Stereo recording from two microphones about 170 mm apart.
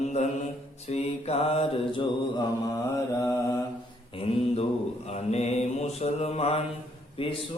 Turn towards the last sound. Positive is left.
turn(degrees=30)  # may be behind; listen again after turning